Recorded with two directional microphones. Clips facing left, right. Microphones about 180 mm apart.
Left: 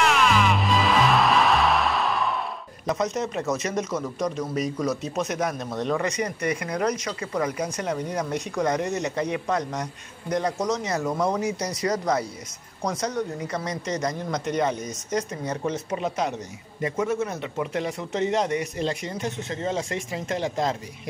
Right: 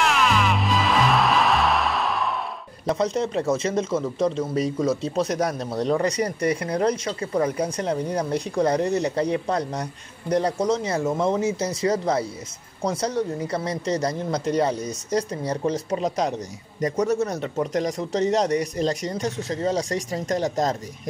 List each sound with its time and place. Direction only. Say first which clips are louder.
0.0 s music: even; centre (ahead or behind)
2.9 s speech: right 3 dB; 30° right (ahead or behind)